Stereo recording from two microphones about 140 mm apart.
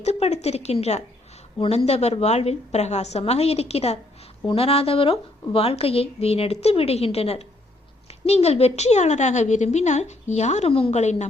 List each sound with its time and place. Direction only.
0.0 s a woman's voice: 50° left (ahead or behind)